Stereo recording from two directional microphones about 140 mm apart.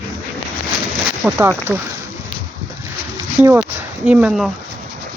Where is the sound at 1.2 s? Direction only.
15° right (ahead or behind).